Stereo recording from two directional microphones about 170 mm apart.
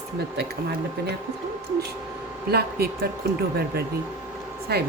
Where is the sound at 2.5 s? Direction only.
65° right (ahead or behind).